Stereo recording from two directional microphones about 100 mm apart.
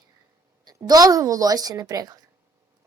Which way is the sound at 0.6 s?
40° right (ahead or behind).